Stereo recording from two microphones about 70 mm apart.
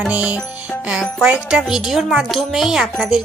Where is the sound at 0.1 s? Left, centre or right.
Centre.